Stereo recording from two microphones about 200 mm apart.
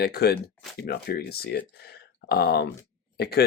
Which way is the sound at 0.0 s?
50° left (ahead or behind).